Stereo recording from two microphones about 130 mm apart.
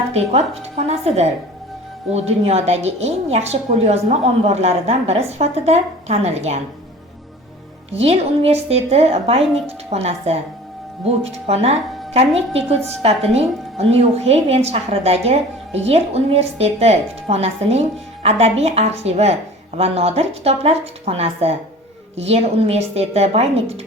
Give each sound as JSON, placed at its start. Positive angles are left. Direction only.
{"t": 0.1, "sound": "a woman's voice", "side_deg": -55}
{"t": 8.0, "sound": "a woman's voice", "side_deg": -50}